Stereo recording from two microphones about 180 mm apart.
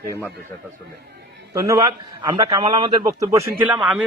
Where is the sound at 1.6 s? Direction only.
15° right (ahead or behind).